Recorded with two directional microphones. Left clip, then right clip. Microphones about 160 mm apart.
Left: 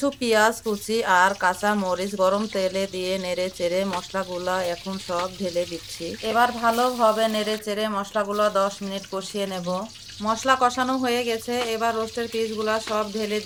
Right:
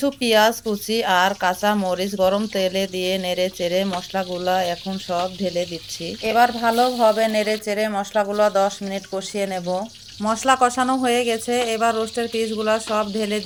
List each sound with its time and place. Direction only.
0.0 s speech: 15° right (ahead or behind)
6.3 s speech: 35° right (ahead or behind)
7.2 s speech: 15° right (ahead or behind)
10.2 s speech: 30° right (ahead or behind)